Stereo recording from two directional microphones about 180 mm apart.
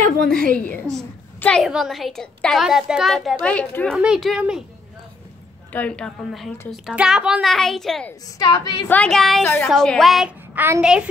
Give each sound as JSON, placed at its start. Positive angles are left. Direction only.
{"t": 0.2, "sound": "a woman's voice", "side_deg": -50}
{"t": 0.9, "sound": "a child's voice", "side_deg": 5}
{"t": 5.7, "sound": "a child's voice", "side_deg": 10}
{"t": 8.4, "sound": "a woman's voice", "side_deg": 25}
{"t": 8.8, "sound": "a woman's voice", "side_deg": 5}